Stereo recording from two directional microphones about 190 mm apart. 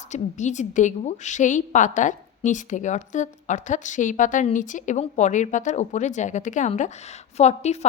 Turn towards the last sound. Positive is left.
turn(degrees=35)  # may be behind; listen again after turning